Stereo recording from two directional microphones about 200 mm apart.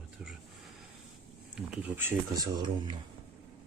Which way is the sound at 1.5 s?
10° right (ahead or behind).